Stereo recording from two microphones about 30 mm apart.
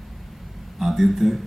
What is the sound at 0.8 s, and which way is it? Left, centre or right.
Speech, centre.